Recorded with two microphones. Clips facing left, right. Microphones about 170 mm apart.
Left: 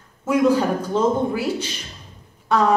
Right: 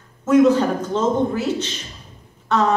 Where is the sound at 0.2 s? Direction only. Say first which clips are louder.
Right 3 dB; 10° left (ahead or behind).